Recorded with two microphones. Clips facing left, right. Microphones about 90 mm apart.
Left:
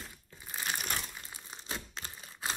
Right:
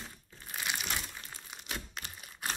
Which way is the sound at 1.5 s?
30° left (ahead or behind).